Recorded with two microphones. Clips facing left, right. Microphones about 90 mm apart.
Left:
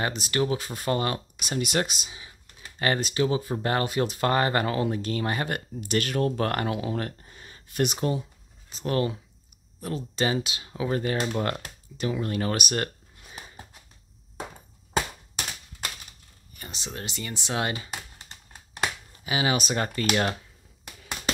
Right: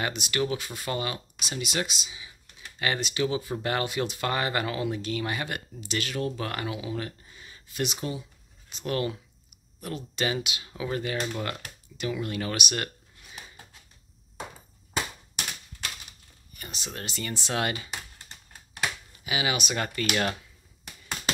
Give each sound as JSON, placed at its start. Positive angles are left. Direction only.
{"t": 0.0, "sound": "speech", "side_deg": 35}
{"t": 16.5, "sound": "speech", "side_deg": 25}